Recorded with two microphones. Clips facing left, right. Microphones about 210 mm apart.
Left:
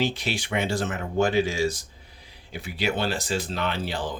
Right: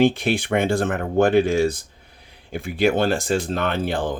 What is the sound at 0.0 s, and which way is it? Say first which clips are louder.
Speech: right 9 dB; 55° right (ahead or behind).